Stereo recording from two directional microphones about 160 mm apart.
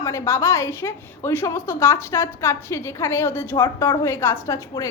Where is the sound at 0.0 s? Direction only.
20° left (ahead or behind).